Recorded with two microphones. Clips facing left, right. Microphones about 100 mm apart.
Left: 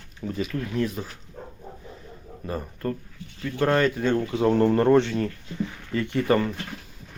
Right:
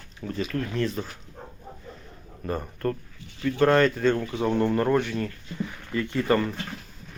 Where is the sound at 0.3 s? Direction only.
15° left (ahead or behind).